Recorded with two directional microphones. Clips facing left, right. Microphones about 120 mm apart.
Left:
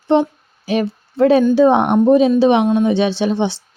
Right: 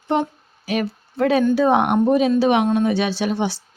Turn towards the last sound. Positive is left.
turn(degrees=25)  # may be behind; listen again after turning